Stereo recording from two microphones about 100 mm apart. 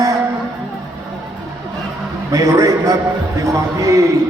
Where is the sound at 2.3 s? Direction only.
30° right (ahead or behind).